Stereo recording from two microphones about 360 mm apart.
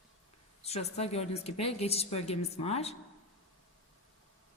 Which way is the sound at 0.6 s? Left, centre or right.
Centre.